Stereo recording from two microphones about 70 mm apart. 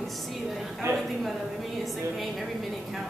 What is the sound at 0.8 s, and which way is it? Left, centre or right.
Speech, right.